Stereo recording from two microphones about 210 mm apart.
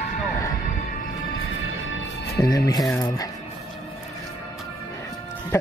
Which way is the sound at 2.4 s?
15° left (ahead or behind).